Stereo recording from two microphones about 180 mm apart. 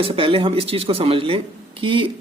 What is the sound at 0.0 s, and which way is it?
Speech, 30° right (ahead or behind).